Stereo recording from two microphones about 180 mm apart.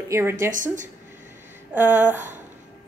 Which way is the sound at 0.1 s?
15° right (ahead or behind).